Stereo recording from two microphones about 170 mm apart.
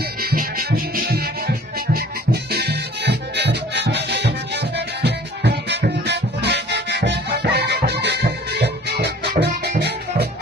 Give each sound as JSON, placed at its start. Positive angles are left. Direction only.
{"t": 0.2, "sound": "music", "side_deg": -60}